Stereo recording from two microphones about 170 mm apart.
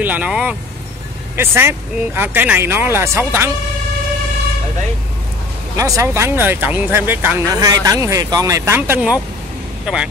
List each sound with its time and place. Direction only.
0.0 s speech: 10° right (ahead or behind)
5.8 s speech: 20° right (ahead or behind)